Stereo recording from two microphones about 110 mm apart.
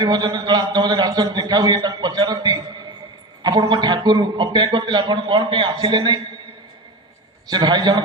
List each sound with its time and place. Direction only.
0.0 s a man's voice: 35° right (ahead or behind)
7.5 s a man's voice: 40° right (ahead or behind)